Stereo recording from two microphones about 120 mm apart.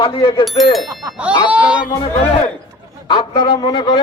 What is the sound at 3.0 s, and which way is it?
Speech, 40° left (ahead or behind).